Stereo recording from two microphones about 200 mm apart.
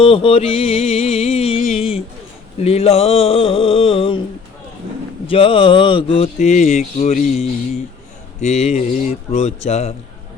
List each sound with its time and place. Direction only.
0.0 s speech: 25° left (ahead or behind)
5.2 s speech: 25° left (ahead or behind)